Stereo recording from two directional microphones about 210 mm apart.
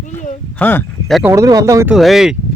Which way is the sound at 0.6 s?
10° left (ahead or behind).